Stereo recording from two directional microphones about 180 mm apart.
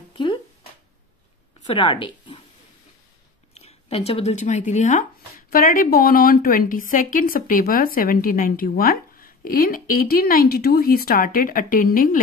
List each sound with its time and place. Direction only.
0.1 s a sound: 25° left (ahead or behind)
1.7 s speech: 30° left (ahead or behind)
3.5 s a woman's voice: 35° left (ahead or behind); by 12.2 s 50° left (ahead or behind)